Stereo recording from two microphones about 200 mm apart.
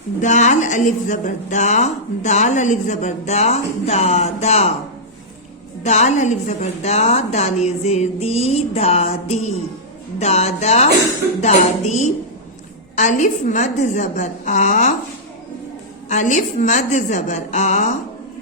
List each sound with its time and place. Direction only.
0.2 s a woman's voice: 35° left (ahead or behind)
5.8 s a woman's voice: 35° left (ahead or behind)
16.0 s a woman's voice: 35° left (ahead or behind)